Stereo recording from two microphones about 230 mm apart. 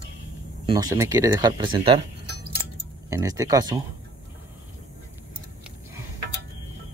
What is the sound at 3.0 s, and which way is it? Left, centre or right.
Speech, centre.